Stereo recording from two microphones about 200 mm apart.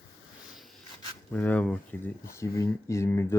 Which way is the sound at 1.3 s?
5° left (ahead or behind).